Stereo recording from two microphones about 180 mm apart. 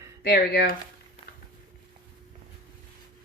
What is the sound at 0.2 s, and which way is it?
Speech, 60° left (ahead or behind).